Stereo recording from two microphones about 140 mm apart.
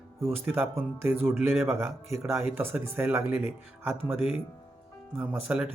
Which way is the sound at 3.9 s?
45° left (ahead or behind).